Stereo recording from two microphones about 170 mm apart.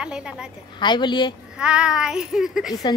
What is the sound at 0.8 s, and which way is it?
Speech, 25° left (ahead or behind).